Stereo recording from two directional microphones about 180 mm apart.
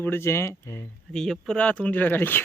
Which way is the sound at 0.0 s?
15° left (ahead or behind).